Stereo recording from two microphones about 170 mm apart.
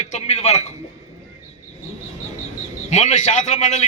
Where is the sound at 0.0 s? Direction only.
40° left (ahead or behind).